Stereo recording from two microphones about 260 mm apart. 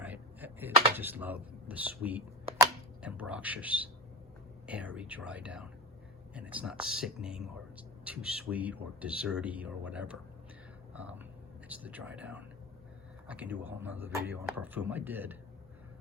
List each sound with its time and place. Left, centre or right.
0.0 s typing: centre
0.9 s speech: centre